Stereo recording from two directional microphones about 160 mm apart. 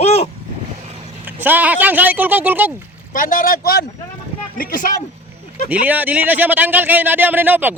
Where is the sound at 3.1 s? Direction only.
60° left (ahead or behind).